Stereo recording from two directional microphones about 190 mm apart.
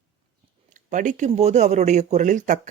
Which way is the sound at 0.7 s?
40° right (ahead or behind).